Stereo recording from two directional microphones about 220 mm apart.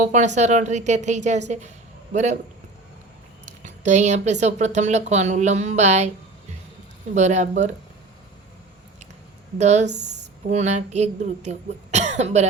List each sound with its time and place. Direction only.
0.0 s speech: 35° right (ahead or behind)
3.4 s speech: 35° right (ahead or behind)
7.1 s speech: 30° right (ahead or behind)
9.6 s speech: 30° right (ahead or behind)
9.8 s speech: 50° right (ahead or behind)
10.5 s speech: 30° right (ahead or behind)